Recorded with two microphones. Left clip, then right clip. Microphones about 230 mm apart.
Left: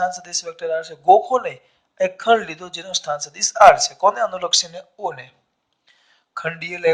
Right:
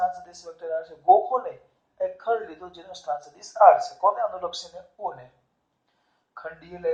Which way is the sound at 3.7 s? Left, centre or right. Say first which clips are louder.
Left 5 dB; left.